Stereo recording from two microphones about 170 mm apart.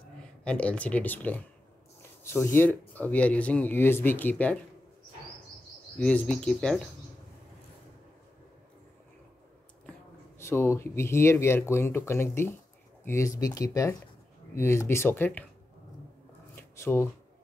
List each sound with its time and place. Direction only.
0.4 s speech: 5° left (ahead or behind)
5.9 s speech: 5° left (ahead or behind)
10.4 s speech: 15° left (ahead or behind)
16.5 s shuffling cards: 15° left (ahead or behind)